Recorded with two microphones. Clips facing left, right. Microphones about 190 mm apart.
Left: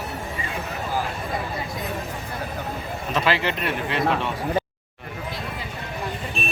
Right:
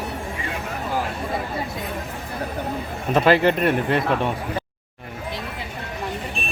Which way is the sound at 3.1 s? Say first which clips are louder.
Right 7 dB; 50° right (ahead or behind).